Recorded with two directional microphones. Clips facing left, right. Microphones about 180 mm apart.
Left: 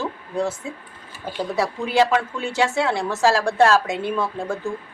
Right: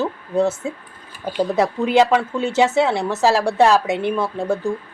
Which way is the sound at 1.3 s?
20° right (ahead or behind).